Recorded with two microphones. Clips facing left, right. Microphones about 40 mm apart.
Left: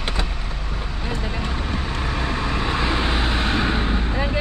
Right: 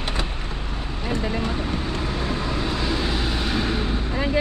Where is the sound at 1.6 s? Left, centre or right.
Left.